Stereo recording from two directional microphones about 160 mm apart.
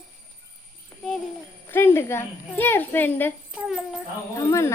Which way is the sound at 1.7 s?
15° left (ahead or behind).